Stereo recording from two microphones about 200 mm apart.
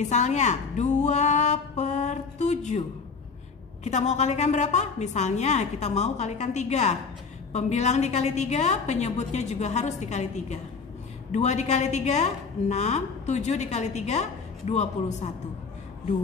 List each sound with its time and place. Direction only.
0.0 s a woman's voice: 35° left (ahead or behind)
3.8 s a woman's voice: 35° left (ahead or behind)